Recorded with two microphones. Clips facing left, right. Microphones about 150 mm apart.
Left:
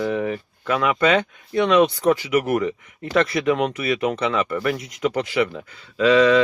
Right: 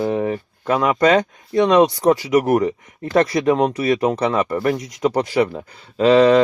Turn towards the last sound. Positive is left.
turn(degrees=-35)  # may be behind; listen again after turning